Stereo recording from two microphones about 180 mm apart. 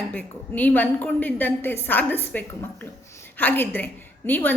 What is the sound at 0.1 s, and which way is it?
A woman's voice, 10° left (ahead or behind).